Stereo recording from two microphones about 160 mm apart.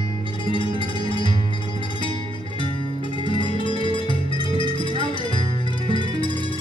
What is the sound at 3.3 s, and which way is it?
Music, 30° left (ahead or behind).